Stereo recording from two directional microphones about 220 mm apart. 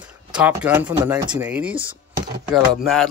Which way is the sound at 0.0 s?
5° right (ahead or behind).